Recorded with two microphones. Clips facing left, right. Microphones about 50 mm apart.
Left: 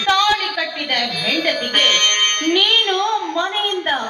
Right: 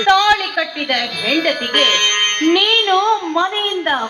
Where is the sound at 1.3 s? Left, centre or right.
Right.